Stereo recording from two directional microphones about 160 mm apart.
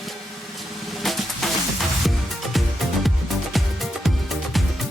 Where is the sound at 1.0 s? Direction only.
Centre (ahead or behind).